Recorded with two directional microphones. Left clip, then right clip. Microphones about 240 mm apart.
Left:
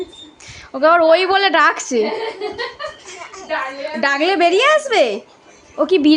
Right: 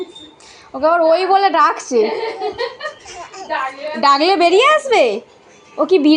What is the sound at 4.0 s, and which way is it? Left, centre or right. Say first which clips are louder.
A woman's voice: right 3 dB; centre.